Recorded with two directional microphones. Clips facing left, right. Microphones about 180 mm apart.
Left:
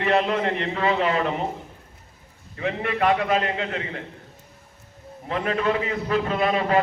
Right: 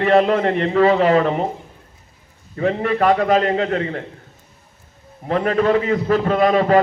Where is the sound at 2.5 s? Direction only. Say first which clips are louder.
Right 7 dB; 40° right (ahead or behind).